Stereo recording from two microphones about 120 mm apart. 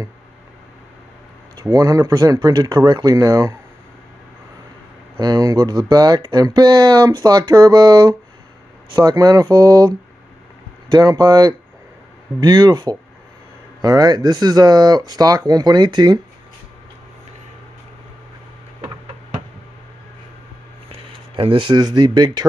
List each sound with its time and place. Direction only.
1.6 s speech: 30° right (ahead or behind)
5.2 s speech: 35° right (ahead or behind)
21.4 s speech: 45° right (ahead or behind)